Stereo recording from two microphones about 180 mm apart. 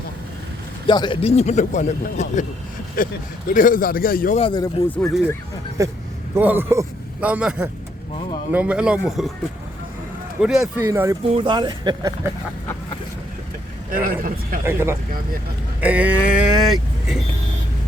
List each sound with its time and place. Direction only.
0.9 s a man's voice: 25° left (ahead or behind); by 4.4 s 55° left (ahead or behind)
4.4 s speech: 30° left (ahead or behind)
4.6 s speech: 20° left (ahead or behind)
5.8 s a man's voice: 15° right (ahead or behind); by 9.3 s centre (ahead or behind)
10.4 s speech: 5° right (ahead or behind)
10.8 s speech: 15° right (ahead or behind)
11.3 s speech: 25° right (ahead or behind)
13.9 s speech: 50° right (ahead or behind)
14.6 s speech: 15° right (ahead or behind)